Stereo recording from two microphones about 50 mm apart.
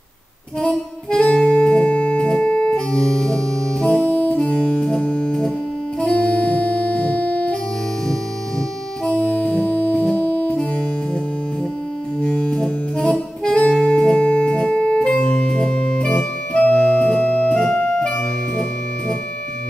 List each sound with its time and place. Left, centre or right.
1.1 s music: centre
9.2 s music: centre
10.1 s music: left
12.2 s music: centre